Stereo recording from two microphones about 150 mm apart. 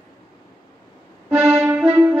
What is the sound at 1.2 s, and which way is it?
Music, 15° right (ahead or behind).